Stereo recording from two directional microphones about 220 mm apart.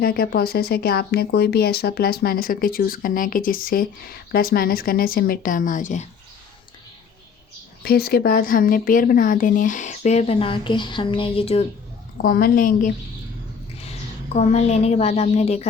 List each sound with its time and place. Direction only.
0.0 s speech: 45° left (ahead or behind)
7.8 s speech: 45° left (ahead or behind); by 11.6 s 25° left (ahead or behind)
12.1 s speech: 40° left (ahead or behind)
14.3 s a woman's voice: 30° left (ahead or behind)